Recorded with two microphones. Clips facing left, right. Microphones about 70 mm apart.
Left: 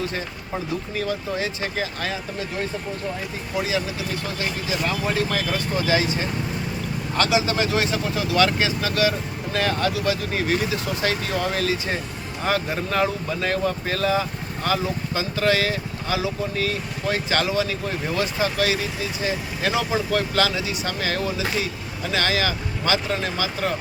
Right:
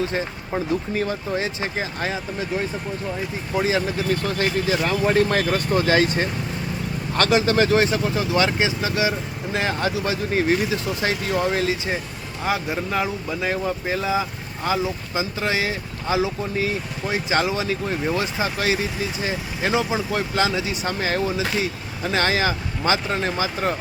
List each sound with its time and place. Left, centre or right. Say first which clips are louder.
0.0 s speech: right 4 dB; right
3.6 s speech: right 4 dB; right
12.4 s speech: even; centre; by 23.7 s right